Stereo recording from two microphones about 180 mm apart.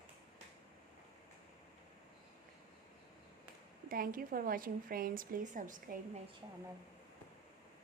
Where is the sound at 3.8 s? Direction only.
50° right (ahead or behind).